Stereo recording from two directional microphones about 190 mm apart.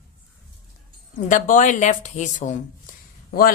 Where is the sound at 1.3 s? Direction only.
45° left (ahead or behind).